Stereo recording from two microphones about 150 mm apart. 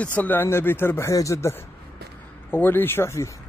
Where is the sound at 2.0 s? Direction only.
90° right.